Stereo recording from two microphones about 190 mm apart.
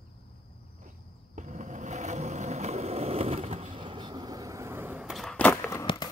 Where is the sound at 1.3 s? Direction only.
40° right (ahead or behind); by 5.9 s 10° left (ahead or behind).